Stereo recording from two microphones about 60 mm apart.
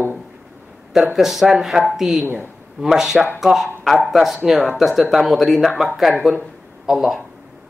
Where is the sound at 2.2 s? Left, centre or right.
Right.